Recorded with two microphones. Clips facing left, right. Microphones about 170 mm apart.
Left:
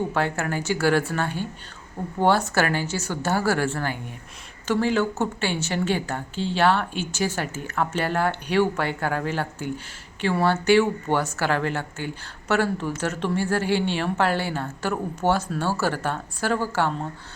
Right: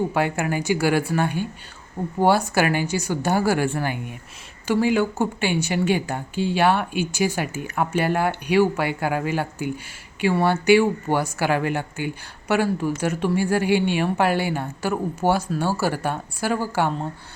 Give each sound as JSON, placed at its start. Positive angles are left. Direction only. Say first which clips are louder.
{"t": 0.1, "sound": "a woman's voice", "louder": "right 2 dB", "side_deg": -15}